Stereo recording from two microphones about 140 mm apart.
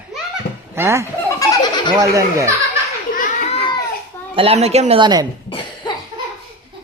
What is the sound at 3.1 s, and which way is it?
Children playing, 75° left (ahead or behind).